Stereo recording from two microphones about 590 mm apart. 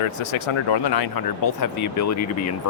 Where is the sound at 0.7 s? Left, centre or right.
Left.